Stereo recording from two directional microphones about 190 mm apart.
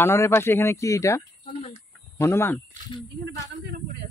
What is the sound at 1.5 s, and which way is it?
Speech, 35° left (ahead or behind).